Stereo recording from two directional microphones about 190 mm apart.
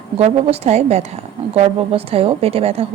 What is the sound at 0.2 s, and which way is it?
A woman's voice, 35° right (ahead or behind).